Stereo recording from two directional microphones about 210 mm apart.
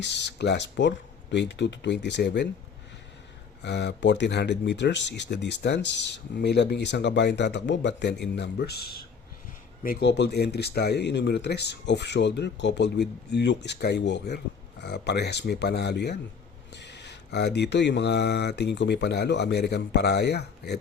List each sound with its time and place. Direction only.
0.0 s speech: 55° left (ahead or behind)
3.6 s speech: 55° left (ahead or behind)